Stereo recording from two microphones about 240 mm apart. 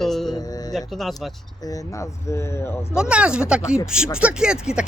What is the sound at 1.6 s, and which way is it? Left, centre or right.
Speech, centre.